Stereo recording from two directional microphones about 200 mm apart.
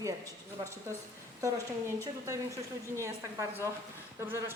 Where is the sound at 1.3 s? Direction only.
15° right (ahead or behind).